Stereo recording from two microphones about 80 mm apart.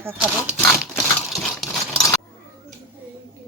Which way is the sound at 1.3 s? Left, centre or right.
Centre.